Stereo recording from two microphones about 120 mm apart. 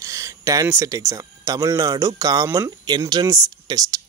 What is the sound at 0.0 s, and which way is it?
Speech, 25° right (ahead or behind).